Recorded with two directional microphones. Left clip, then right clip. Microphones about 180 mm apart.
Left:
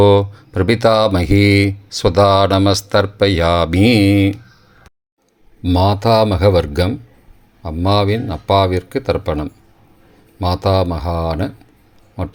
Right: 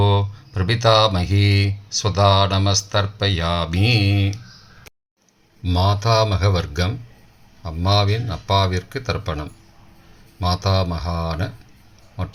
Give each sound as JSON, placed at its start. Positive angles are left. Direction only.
{"t": 0.0, "sound": "speech", "side_deg": 45}
{"t": 5.6, "sound": "speech", "side_deg": 35}